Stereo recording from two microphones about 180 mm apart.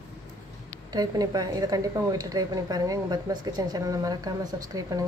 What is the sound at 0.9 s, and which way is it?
A woman's voice, 20° right (ahead or behind).